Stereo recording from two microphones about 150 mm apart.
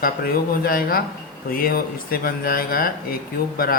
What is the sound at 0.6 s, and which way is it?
Speech, 80° left.